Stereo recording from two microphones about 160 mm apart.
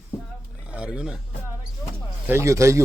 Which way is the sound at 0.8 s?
5° right (ahead or behind).